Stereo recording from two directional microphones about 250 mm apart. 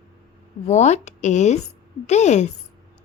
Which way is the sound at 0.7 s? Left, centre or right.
Left.